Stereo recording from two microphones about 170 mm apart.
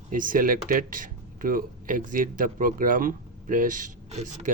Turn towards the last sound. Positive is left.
turn(degrees=-40)  # may be behind; listen again after turning